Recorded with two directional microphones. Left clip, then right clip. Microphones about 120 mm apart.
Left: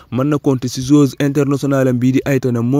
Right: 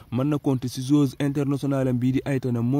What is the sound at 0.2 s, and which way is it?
Speech, 30° left (ahead or behind).